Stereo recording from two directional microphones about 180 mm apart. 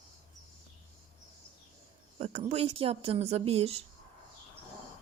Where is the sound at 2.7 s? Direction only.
30° right (ahead or behind).